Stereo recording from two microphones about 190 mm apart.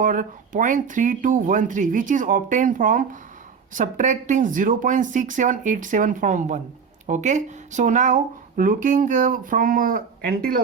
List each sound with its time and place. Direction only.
0.0 s speech: 45° right (ahead or behind)